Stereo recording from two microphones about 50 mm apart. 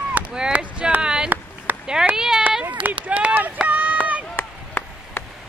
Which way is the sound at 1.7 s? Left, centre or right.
Right.